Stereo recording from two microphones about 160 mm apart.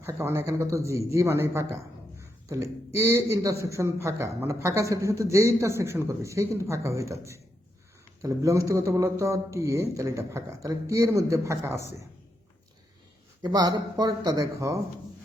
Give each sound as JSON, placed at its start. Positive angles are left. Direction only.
{"t": 0.0, "sound": "a man's voice", "side_deg": -15}
{"t": 8.2, "sound": "a man's voice", "side_deg": -20}
{"t": 13.4, "sound": "a man's voice", "side_deg": -25}